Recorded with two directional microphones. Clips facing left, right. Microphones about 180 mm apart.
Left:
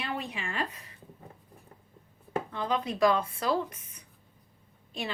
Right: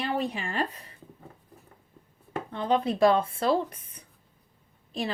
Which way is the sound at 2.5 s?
30° right (ahead or behind).